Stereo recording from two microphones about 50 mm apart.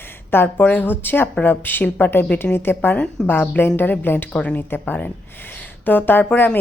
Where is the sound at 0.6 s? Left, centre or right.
Left.